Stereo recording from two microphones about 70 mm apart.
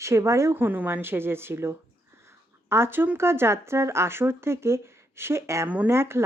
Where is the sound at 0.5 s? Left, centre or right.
Right.